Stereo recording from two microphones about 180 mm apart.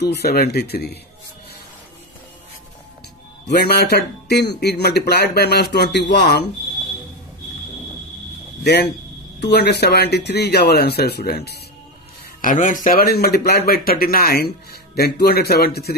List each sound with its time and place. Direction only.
0.0 s speech: 60° left (ahead or behind)
3.5 s speech: 65° left (ahead or behind)
9.4 s speech: 65° left (ahead or behind)
12.4 s speech: 45° left (ahead or behind)